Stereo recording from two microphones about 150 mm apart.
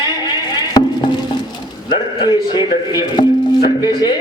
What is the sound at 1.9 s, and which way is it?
Speech, 30° left (ahead or behind).